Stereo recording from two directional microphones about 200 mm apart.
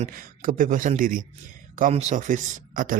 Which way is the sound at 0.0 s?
45° right (ahead or behind).